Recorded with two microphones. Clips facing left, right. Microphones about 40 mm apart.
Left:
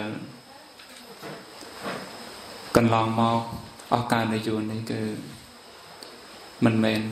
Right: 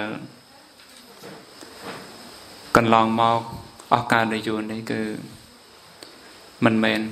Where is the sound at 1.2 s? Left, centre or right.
Left.